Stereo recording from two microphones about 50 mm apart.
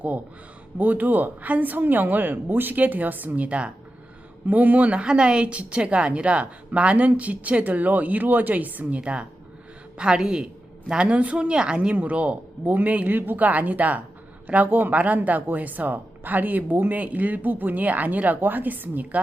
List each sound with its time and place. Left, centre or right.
0.8 s speech: right
5.0 s a woman's voice: centre; by 9.0 s right
9.0 s a woman's voice: right